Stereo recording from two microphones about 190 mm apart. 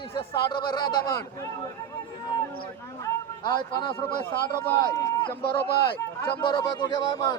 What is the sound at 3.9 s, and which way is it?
Speech, 25° left (ahead or behind).